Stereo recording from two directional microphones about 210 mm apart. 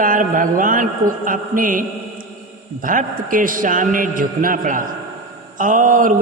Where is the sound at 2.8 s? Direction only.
40° right (ahead or behind).